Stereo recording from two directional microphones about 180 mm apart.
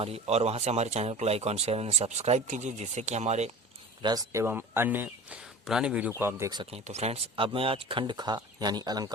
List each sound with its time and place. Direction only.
0.0 s speech: 35° right (ahead or behind)
4.0 s speech: 20° right (ahead or behind)
6.8 s speech: 35° right (ahead or behind); by 9.1 s 20° right (ahead or behind)